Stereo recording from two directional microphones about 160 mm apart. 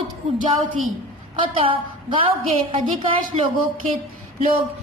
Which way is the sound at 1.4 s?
30° right (ahead or behind).